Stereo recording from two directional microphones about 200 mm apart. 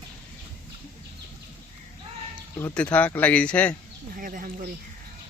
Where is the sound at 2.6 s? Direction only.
5° left (ahead or behind).